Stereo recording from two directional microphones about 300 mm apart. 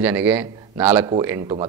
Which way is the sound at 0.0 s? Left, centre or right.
Centre.